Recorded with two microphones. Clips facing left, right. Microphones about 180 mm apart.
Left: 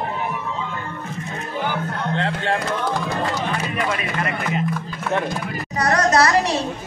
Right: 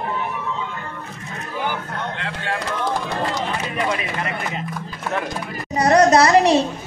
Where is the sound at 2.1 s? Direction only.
30° left (ahead or behind).